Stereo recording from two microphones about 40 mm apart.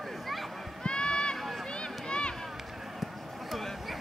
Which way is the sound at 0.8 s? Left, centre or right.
Left.